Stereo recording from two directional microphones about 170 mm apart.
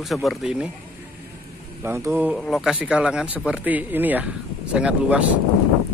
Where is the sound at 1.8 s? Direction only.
15° right (ahead or behind).